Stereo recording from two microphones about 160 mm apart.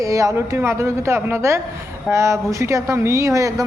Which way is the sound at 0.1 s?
20° right (ahead or behind).